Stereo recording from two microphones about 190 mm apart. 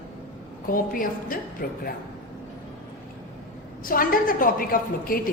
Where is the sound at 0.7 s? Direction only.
45° left (ahead or behind).